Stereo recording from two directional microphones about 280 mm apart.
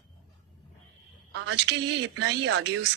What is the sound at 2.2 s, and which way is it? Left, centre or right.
Speech, right.